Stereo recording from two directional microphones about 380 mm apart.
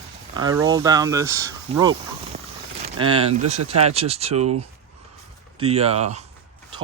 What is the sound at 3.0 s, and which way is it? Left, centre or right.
Speech, centre.